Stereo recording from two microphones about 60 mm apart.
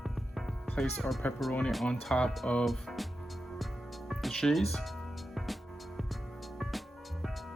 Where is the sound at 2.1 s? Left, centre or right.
Centre.